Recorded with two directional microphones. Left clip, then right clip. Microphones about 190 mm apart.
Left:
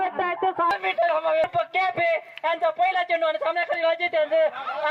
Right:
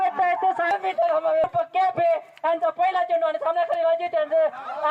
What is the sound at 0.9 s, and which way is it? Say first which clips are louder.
A man's voice: right 1 dB; 25° right (ahead or behind).